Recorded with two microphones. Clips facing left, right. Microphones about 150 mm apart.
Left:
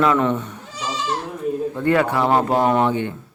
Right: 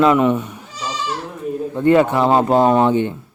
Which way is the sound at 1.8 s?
20° right (ahead or behind).